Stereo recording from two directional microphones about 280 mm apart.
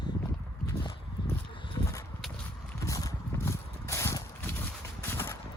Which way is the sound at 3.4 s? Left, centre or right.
Centre.